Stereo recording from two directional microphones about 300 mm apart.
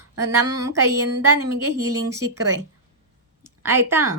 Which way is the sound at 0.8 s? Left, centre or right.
Right.